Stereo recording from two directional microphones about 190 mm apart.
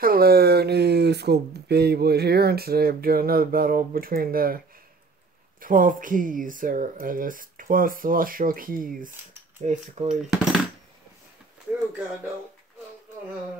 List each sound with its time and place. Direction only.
0.0 s speech: 50° right (ahead or behind)
5.6 s speech: 45° right (ahead or behind)
10.3 s a sound: centre (ahead or behind)